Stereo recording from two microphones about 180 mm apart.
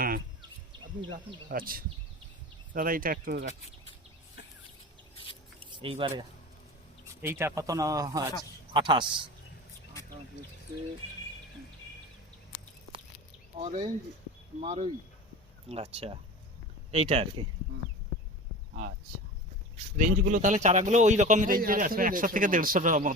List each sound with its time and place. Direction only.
1.5 s a man's voice: 50° right (ahead or behind)
5.5 s a sound: 30° right (ahead or behind)
7.2 s speech: 15° right (ahead or behind)
13.6 s speech: 35° right (ahead or behind)
18.7 s speech: 45° right (ahead or behind)
20.0 s a man's voice: 45° right (ahead or behind)